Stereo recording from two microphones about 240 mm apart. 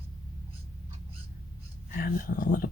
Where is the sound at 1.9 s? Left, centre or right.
Left.